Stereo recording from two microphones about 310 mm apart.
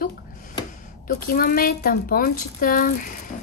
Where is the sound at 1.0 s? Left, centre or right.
Left.